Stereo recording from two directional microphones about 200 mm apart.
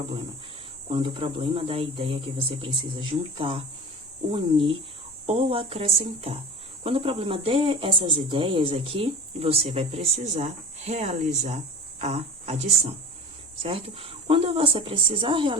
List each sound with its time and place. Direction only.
0.9 s speech: 25° right (ahead or behind)